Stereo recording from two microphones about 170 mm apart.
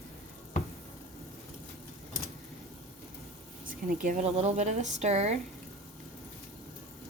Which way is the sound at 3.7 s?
55° right (ahead or behind).